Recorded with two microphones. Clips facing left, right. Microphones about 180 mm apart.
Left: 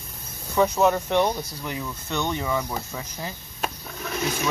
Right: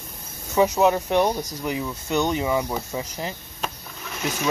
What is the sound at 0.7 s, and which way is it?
Speech, 10° right (ahead or behind).